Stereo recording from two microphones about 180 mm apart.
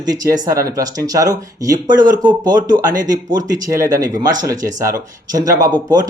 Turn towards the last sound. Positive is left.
turn(degrees=-20)  # may be behind; listen again after turning